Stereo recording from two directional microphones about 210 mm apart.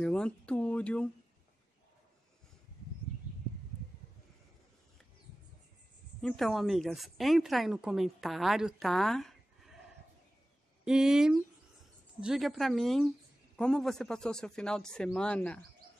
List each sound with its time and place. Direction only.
0.0 s speech: 5° left (ahead or behind)
6.2 s speech: centre (ahead or behind)
10.9 s speech: 5° right (ahead or behind)